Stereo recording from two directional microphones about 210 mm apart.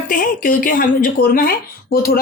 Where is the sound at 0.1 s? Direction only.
40° left (ahead or behind).